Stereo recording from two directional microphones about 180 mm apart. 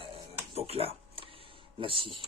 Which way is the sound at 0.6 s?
35° right (ahead or behind).